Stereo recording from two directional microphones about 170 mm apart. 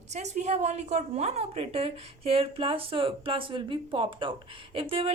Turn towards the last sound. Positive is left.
turn(degrees=-30)  # may be behind; listen again after turning